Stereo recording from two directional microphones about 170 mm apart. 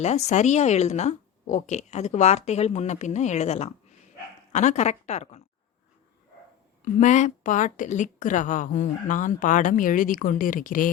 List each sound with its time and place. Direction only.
0.0 s speech: 40° left (ahead or behind)
7.0 s a woman's voice: 45° left (ahead or behind)